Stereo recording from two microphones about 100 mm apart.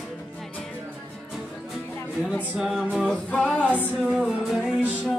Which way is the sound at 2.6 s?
5° right (ahead or behind).